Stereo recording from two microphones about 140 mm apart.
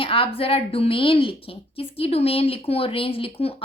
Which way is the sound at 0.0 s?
40° left (ahead or behind).